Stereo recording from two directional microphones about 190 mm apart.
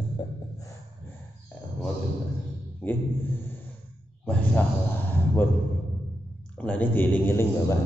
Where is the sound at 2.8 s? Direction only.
10° left (ahead or behind).